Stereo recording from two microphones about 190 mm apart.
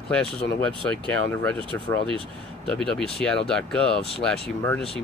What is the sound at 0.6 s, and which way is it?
Speech, 5° left (ahead or behind).